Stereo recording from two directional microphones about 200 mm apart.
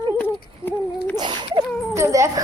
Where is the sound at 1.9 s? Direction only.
15° right (ahead or behind).